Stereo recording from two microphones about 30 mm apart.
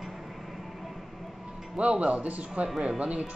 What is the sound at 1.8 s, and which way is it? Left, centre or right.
Speech, right.